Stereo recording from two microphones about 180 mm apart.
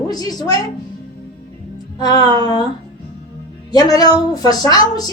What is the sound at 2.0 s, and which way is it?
Music, 20° left (ahead or behind).